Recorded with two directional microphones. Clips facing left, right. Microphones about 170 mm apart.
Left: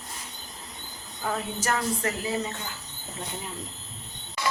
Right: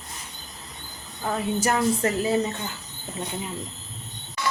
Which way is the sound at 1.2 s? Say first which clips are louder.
Right 5 dB; 10° right (ahead or behind).